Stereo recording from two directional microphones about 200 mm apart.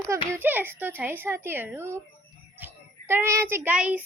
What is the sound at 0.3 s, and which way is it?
A child's voice, 10° right (ahead or behind).